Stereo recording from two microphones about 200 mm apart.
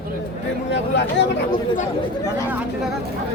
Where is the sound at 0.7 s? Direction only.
60° left (ahead or behind).